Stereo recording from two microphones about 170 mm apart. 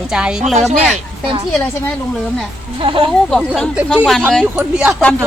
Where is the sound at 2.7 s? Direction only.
30° right (ahead or behind).